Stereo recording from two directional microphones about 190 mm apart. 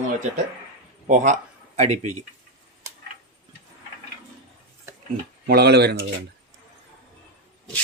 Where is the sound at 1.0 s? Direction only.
40° right (ahead or behind).